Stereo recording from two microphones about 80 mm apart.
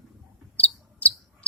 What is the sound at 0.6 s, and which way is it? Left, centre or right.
Cricket, left.